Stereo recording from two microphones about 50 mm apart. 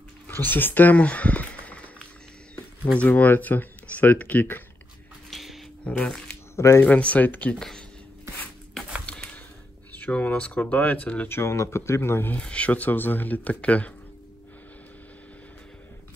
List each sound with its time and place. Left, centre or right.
0.3 s speech: left
0.9 s a sound: left
2.5 s speech: left
5.3 s a sound: centre
6.0 s speech: centre
6.5 s speech: left
6.8 s speech: left
7.5 s speech: centre
9.9 s speech: left
11.2 s speech: left
11.5 s speech: left
12.4 s speech: left